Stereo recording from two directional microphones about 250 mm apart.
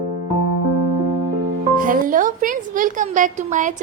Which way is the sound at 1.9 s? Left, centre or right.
Right.